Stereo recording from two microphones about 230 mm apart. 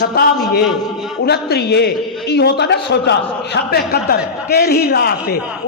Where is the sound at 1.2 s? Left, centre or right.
Left.